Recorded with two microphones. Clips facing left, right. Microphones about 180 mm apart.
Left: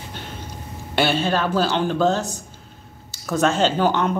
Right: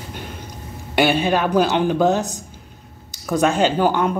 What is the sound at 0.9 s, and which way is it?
Speech, 15° right (ahead or behind).